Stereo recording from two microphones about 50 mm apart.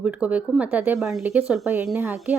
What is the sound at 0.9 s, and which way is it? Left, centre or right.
Speech, centre.